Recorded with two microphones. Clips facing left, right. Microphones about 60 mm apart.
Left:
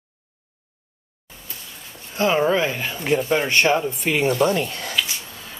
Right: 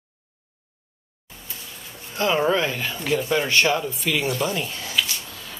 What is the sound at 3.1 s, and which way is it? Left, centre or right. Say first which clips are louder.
Speech: left 2 dB; left.